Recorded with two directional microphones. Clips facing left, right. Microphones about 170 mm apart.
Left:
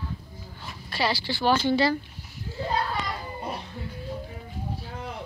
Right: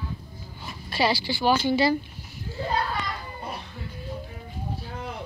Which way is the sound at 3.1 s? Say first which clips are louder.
Left 2 dB; 20° left (ahead or behind).